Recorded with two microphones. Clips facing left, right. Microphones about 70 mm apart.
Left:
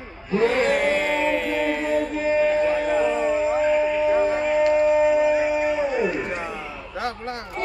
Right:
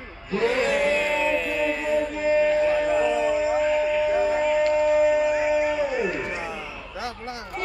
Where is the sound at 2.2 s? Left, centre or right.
Left.